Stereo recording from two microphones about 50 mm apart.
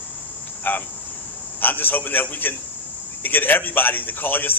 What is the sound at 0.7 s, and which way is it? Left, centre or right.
A man's voice, left.